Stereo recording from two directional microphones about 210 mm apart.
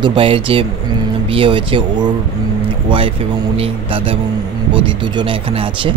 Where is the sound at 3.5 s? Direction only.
25° right (ahead or behind).